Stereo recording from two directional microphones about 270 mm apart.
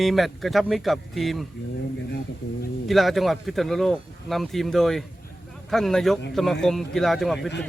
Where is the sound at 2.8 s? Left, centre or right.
Centre.